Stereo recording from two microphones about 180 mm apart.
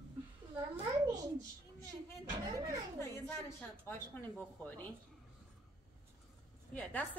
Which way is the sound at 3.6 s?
10° left (ahead or behind).